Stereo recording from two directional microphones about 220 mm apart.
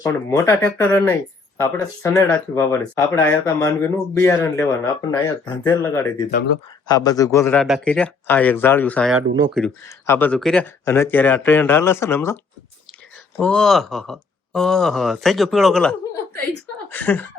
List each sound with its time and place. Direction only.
0.0 s speech: 15° left (ahead or behind)
7.6 s speech: 5° left (ahead or behind)
13.4 s speech: 5° left (ahead or behind)